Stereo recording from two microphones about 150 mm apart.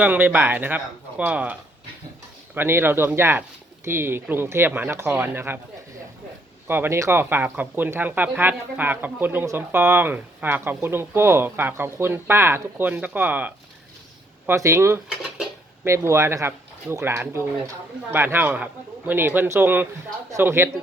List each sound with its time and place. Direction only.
0.0 s speech: 10° right (ahead or behind)
2.6 s speech: 15° right (ahead or behind)
6.7 s speech: 15° right (ahead or behind)